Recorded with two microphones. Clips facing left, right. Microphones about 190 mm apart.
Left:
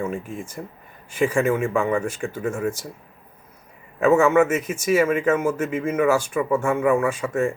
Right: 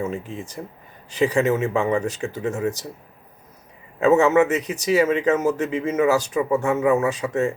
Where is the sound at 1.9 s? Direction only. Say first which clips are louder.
Right 1 dB; 35° right (ahead or behind).